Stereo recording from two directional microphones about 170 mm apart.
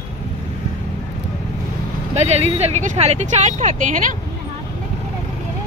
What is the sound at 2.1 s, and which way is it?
Speech, 40° right (ahead or behind).